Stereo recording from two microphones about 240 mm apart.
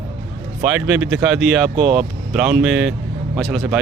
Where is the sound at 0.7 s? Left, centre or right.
Centre.